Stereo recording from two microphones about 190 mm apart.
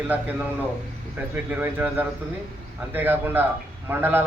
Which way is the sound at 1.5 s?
10° right (ahead or behind).